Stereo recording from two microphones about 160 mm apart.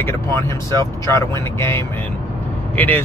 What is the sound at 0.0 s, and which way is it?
Speech, 15° left (ahead or behind).